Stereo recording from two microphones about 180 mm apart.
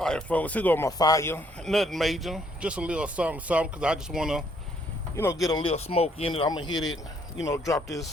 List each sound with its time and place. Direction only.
0.0 s speech: 5° left (ahead or behind)
1.6 s speech: centre (ahead or behind)
5.1 s speech: 15° left (ahead or behind)
5.5 s speech: 25° left (ahead or behind)